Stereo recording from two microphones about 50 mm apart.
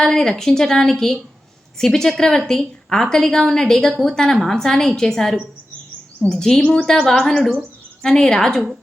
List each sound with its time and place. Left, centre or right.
0.0 s a woman's voice: centre